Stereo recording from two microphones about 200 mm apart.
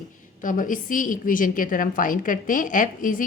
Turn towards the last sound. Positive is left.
turn(degrees=40)  # may be behind; listen again after turning